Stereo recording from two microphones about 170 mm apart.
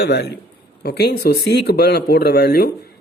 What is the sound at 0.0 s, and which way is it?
A woman's voice, 75° left (ahead or behind).